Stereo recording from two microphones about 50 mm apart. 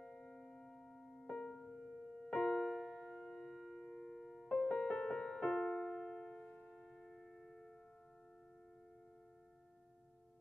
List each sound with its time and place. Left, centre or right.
0.0 s music: centre
1.6 s music: centre
2.4 s music: centre
4.6 s music: centre
5.6 s keyboard: centre